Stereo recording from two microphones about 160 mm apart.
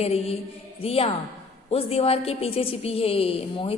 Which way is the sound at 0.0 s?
40° left (ahead or behind).